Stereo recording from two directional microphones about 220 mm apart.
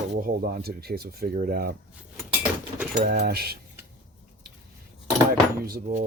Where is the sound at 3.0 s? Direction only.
45° right (ahead or behind).